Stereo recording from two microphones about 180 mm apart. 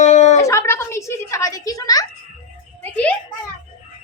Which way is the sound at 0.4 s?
15° left (ahead or behind).